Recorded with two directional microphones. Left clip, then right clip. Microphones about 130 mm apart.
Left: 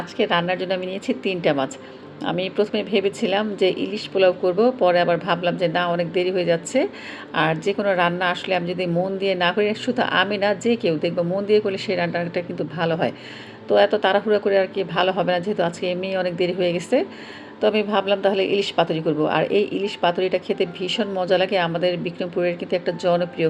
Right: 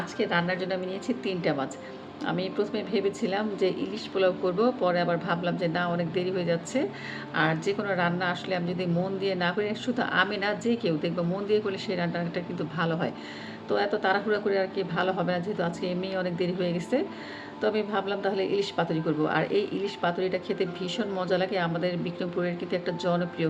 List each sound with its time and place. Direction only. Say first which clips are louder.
0.2 s a woman's voice: left 7 dB; 45° left (ahead or behind)